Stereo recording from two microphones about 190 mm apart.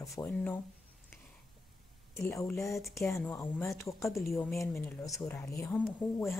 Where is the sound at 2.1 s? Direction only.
15° left (ahead or behind).